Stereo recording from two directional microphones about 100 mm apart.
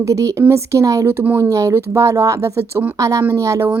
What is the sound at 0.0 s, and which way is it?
A woman's voice, 30° right (ahead or behind).